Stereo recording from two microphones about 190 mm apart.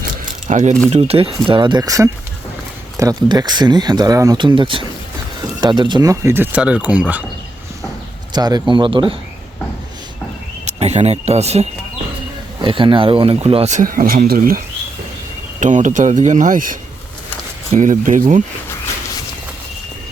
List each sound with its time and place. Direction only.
0.4 s speech: 40° right (ahead or behind); by 7.3 s 5° right (ahead or behind)
8.3 s speech: 20° right (ahead or behind)
10.7 s speech: 35° right (ahead or behind)
15.6 s speech: 40° right (ahead or behind)